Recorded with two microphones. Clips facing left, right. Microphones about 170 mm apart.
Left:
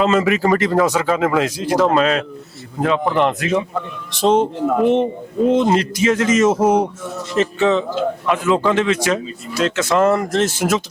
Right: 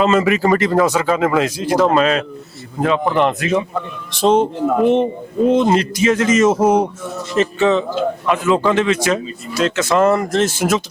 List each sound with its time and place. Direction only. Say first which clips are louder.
0.0 s speech: right 1 dB; 10° right (ahead or behind)
4.6 s speech: right 1 dB; 25° right (ahead or behind)
5.5 s speech: right 1 dB; 10° right (ahead or behind)
6.8 s speech: right 1 dB; 25° right (ahead or behind)
7.3 s a sound: right 1 dB; 10° right (ahead or behind)
7.9 s speech: right 1 dB; 10° right (ahead or behind)